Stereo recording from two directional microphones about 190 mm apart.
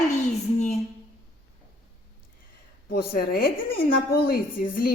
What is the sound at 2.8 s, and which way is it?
A woman's voice, 50° left (ahead or behind).